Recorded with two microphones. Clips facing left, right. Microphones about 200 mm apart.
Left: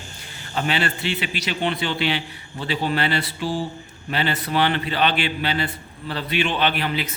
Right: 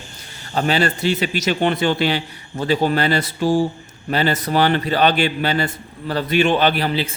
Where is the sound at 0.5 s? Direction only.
40° right (ahead or behind).